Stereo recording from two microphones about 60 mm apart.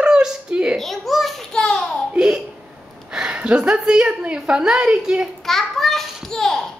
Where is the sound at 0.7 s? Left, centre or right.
Centre.